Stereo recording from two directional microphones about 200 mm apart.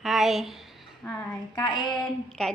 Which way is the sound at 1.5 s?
20° left (ahead or behind).